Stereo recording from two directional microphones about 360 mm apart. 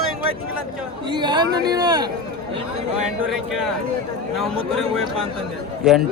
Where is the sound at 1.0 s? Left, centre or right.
Centre.